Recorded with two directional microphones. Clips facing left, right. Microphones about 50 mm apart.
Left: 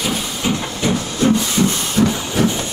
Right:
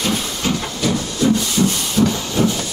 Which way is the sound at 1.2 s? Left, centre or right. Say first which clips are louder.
Left 1 dB; left.